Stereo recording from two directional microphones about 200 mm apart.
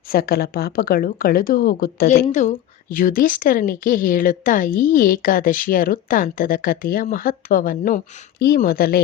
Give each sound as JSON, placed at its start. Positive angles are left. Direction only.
{"t": 0.1, "sound": "a woman's voice", "side_deg": 50}
{"t": 2.3, "sound": "a woman's voice", "side_deg": 40}